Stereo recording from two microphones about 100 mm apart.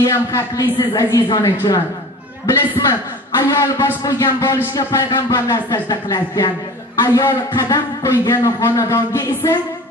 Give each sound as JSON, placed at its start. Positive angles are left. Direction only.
{"t": 0.0, "sound": "a man's voice", "side_deg": 30}